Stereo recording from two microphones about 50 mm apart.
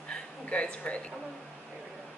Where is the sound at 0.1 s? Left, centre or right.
Left.